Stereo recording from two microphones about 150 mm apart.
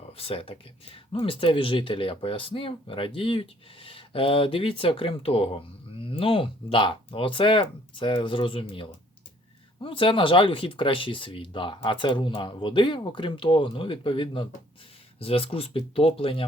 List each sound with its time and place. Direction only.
0.2 s speech: 40° left (ahead or behind)